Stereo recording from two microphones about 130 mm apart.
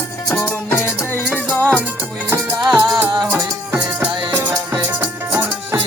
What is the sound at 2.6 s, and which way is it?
Music, centre (ahead or behind).